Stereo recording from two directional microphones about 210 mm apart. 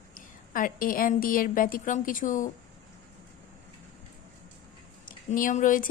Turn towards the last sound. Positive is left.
turn(degrees=40)  # may be behind; listen again after turning